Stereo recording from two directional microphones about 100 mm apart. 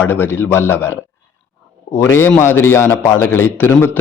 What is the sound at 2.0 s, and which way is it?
A man's voice, 25° left (ahead or behind).